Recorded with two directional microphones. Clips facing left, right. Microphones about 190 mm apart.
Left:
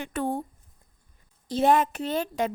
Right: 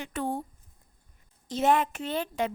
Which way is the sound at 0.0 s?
55° left (ahead or behind).